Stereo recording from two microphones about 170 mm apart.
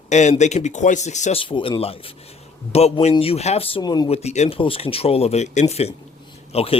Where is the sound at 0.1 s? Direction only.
45° left (ahead or behind); by 4.1 s 25° left (ahead or behind).